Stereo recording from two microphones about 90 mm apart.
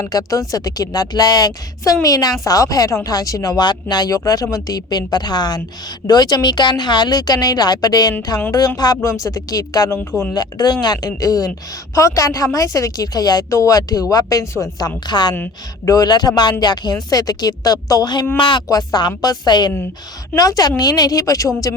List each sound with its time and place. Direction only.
0.1 s speech: 40° left (ahead or behind)
18.3 s speech: 65° left (ahead or behind)
18.7 s speech: 50° left (ahead or behind)
20.3 s speech: 40° left (ahead or behind)